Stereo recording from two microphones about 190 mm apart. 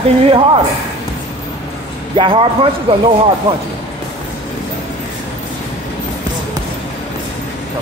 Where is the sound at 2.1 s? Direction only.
25° right (ahead or behind).